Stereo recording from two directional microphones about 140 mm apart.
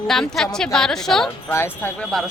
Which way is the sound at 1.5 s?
15° left (ahead or behind).